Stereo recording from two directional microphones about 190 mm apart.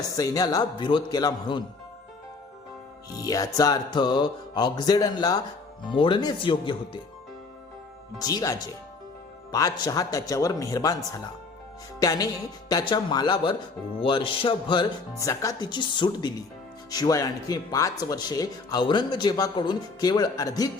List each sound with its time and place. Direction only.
0.2 s speech: 20° left (ahead or behind)
3.2 s speech: 20° left (ahead or behind)
8.2 s speech: 20° left (ahead or behind)